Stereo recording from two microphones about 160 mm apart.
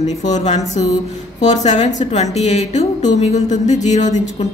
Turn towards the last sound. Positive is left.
turn(degrees=45)  # may be behind; listen again after turning